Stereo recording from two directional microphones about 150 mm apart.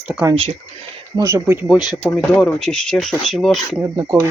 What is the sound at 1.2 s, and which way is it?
Speech, 20° right (ahead or behind).